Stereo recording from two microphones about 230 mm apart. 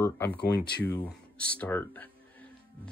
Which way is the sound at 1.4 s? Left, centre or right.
Centre.